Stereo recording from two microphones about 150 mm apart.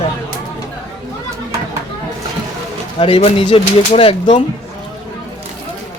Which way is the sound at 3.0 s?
40° left (ahead or behind).